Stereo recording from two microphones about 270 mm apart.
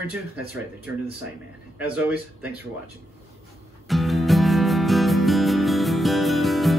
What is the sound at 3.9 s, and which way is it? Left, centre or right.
Music, centre.